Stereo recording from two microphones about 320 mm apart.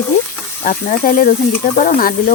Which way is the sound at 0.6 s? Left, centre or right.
Left.